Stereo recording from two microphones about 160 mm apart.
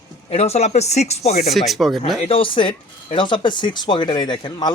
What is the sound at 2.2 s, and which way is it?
Speech, 35° left (ahead or behind).